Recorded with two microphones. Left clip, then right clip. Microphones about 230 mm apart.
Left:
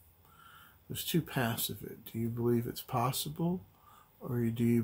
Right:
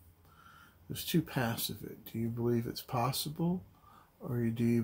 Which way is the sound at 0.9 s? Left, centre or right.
Centre.